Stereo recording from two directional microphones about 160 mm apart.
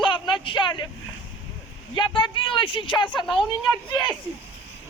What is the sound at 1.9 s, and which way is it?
Speech, 30° left (ahead or behind).